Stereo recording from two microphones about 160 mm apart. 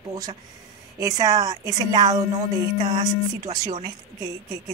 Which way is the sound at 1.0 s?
20° right (ahead or behind).